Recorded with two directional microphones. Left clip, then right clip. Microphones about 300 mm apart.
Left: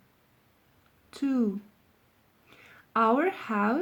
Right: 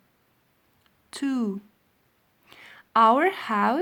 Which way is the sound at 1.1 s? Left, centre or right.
Right.